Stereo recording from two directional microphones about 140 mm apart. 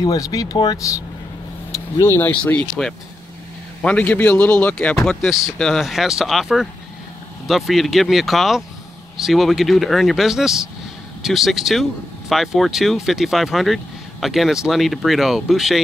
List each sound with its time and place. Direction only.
0.0 s speech: 25° left (ahead or behind); by 15.8 s centre (ahead or behind)